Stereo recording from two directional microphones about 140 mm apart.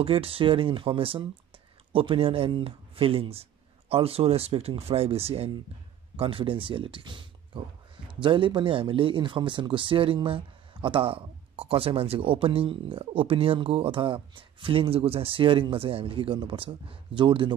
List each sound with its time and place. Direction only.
0.0 s speech: 40° right (ahead or behind)